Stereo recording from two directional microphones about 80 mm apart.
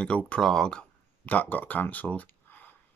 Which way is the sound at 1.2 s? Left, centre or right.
Left.